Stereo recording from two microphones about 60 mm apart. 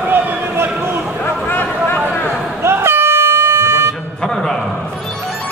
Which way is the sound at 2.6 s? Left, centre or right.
Right.